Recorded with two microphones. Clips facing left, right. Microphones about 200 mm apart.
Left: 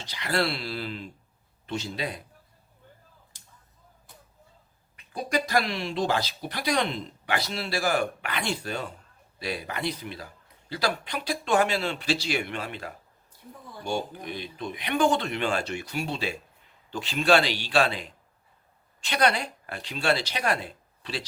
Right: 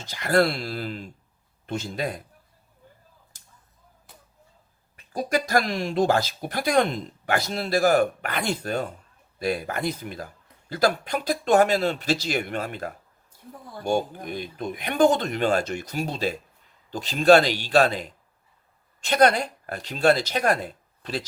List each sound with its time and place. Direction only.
0.0 s speech: 45° right (ahead or behind)
5.3 s a man's voice: 45° right (ahead or behind)